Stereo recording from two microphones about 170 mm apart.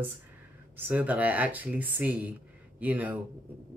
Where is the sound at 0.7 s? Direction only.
10° right (ahead or behind).